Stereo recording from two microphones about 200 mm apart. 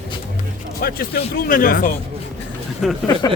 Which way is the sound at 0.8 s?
50° left (ahead or behind).